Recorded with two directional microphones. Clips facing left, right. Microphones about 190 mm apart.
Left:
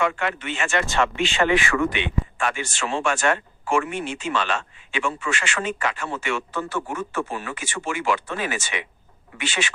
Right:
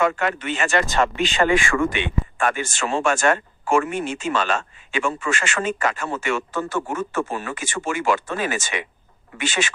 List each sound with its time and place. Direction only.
0.0 s speech: 45° right (ahead or behind)